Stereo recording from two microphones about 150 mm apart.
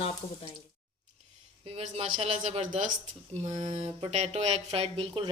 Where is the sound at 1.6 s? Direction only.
40° right (ahead or behind).